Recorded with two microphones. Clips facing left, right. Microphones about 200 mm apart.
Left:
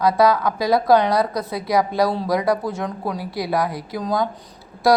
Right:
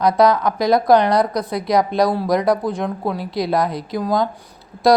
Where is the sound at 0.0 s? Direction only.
15° right (ahead or behind).